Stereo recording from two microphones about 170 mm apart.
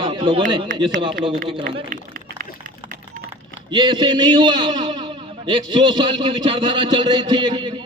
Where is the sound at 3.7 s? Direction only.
25° right (ahead or behind).